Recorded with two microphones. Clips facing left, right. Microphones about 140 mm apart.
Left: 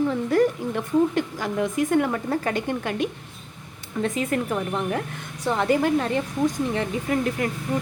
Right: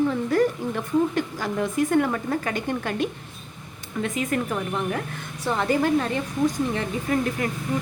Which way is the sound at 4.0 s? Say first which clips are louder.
Left 1 dB; 30° left (ahead or behind).